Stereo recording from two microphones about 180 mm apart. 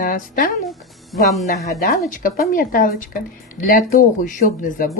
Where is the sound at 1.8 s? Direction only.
55° left (ahead or behind).